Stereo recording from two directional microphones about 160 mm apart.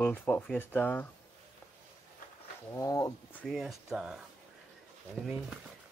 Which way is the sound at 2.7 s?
20° left (ahead or behind).